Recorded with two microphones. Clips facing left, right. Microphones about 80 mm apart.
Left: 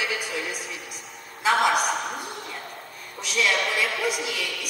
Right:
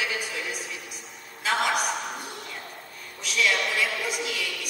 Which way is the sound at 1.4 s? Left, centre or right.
Centre.